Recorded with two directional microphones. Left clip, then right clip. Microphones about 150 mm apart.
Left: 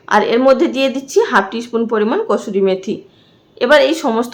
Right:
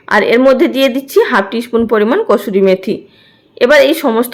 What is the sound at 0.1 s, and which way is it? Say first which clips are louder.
A woman's voice: right 3 dB; 20° right (ahead or behind).